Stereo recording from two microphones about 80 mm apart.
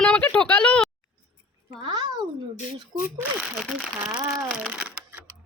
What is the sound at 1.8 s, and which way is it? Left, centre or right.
Speech, right.